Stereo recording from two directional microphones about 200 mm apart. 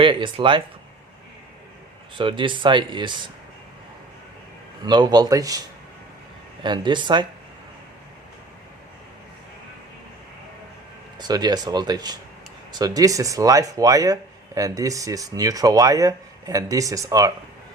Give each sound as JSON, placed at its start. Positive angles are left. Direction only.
{"t": 0.0, "sound": "speech", "side_deg": -25}
{"t": 2.1, "sound": "speech", "side_deg": -25}
{"t": 4.8, "sound": "speech", "side_deg": -20}
{"t": 11.2, "sound": "speech", "side_deg": -20}